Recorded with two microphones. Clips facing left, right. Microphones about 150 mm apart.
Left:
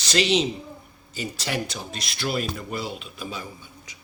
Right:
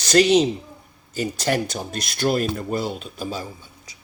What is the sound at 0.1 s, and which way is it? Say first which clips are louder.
Speech: right 6 dB; 45° right (ahead or behind).